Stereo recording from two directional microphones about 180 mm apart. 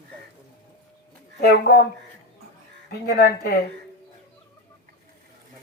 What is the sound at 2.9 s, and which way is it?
Speech, 60° left (ahead or behind).